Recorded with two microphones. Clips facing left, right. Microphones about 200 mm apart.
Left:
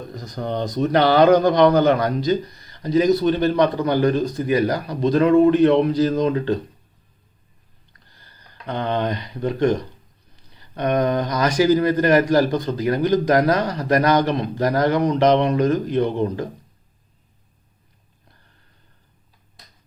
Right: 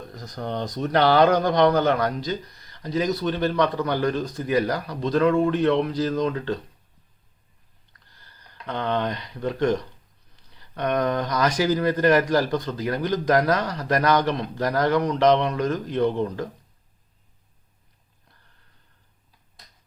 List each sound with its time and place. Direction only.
0.3 s speech: 15° left (ahead or behind)
8.6 s speech: 15° left (ahead or behind)
10.8 s speech: 10° left (ahead or behind)